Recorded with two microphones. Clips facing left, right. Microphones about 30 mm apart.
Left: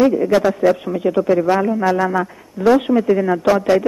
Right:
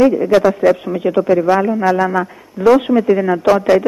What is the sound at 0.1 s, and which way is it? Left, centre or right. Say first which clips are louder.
Speech: right 3 dB; centre.